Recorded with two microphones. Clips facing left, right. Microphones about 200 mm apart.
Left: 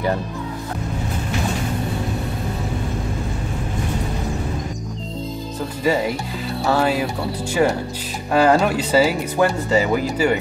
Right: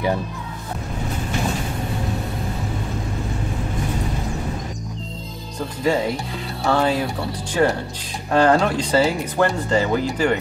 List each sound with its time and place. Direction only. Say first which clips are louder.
6.6 s speech: even; 5° left (ahead or behind)